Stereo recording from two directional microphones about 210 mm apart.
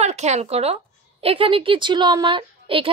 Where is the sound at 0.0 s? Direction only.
30° right (ahead or behind).